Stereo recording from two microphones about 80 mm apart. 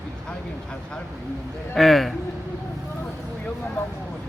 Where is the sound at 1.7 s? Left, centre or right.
Centre.